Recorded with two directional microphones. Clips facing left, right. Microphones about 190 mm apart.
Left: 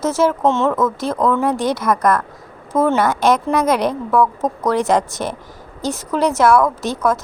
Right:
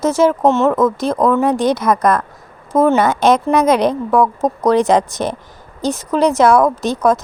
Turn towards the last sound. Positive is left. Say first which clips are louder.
# right 4 dB
turn(degrees=-15)  # may be behind; listen again after turning